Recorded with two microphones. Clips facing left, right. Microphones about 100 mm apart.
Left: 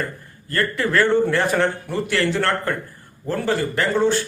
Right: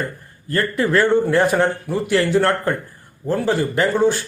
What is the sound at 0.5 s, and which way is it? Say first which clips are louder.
A man's voice: right 2 dB; 15° right (ahead or behind).